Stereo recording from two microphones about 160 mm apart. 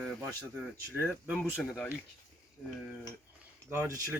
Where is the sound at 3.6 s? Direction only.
15° right (ahead or behind).